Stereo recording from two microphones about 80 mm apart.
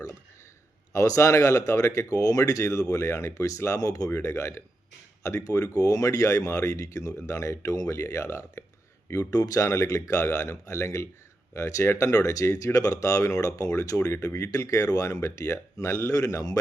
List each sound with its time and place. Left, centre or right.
0.9 s speech: left
4.1 s speech: left
9.0 s speech: left